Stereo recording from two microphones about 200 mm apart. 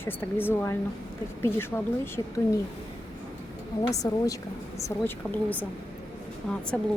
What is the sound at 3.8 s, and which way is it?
Speech, 15° left (ahead or behind).